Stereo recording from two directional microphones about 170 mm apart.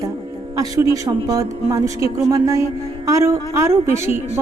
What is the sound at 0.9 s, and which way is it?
A woman's voice, 20° right (ahead or behind).